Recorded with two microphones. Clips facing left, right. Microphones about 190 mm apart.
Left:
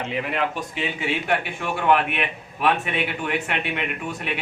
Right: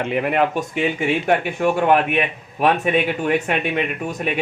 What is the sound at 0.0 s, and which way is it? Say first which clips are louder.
Speech: right 6 dB; 55° right (ahead or behind).